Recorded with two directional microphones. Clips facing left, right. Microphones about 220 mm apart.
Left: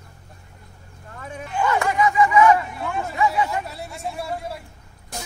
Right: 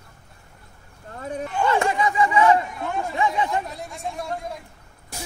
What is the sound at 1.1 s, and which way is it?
Bow-wow, 35° right (ahead or behind).